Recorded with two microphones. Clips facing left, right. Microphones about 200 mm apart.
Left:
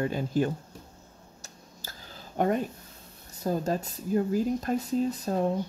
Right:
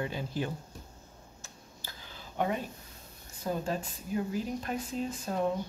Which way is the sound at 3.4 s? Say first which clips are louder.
Left 5 dB; 40° left (ahead or behind).